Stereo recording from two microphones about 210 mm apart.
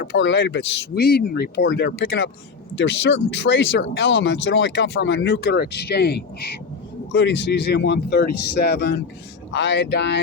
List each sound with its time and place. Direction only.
0.0 s speech: 60° left (ahead or behind)